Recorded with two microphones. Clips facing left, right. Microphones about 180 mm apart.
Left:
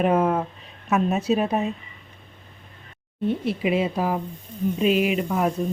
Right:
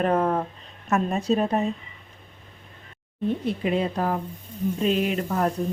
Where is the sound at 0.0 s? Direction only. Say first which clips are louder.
Left 2 dB; 5° left (ahead or behind).